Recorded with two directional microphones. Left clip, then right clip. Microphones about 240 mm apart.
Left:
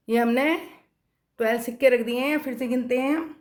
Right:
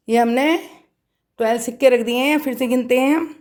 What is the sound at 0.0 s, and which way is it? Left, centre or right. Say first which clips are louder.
A woman's voice: right 6 dB; right.